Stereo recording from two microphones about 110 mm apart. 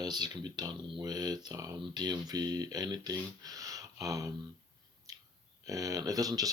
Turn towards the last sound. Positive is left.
turn(degrees=-35)  # may be behind; listen again after turning